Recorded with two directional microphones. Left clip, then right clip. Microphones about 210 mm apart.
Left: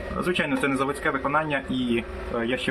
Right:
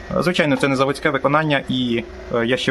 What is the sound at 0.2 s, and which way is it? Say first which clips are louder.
Speech: right 7 dB; 50° right (ahead or behind).